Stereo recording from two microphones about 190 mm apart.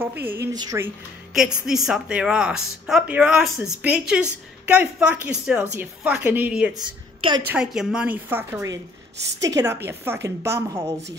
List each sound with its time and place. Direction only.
0.0 s a woman's voice: 10° right (ahead or behind)
1.3 s a woman's voice: centre (ahead or behind)
6.7 s a woman's voice: 25° right (ahead or behind)
7.4 s a woman's voice: 5° right (ahead or behind)